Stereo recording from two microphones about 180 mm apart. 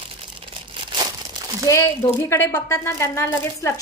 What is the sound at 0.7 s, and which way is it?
Crumpling, 25° right (ahead or behind).